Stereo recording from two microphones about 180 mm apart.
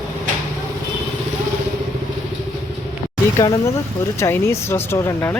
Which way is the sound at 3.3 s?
20° left (ahead or behind).